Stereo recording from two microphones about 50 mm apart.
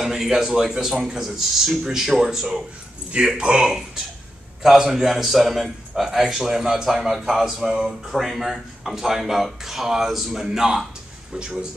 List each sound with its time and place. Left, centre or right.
0.0 s a man's voice: centre